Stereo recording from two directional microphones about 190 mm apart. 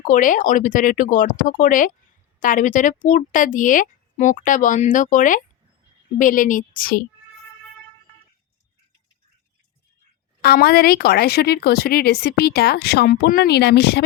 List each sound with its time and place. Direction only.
0.0 s speech: 45° left (ahead or behind)
10.4 s a woman's voice: 55° left (ahead or behind)